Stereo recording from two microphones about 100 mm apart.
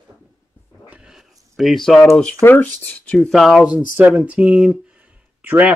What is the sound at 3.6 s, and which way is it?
Speech, 10° right (ahead or behind).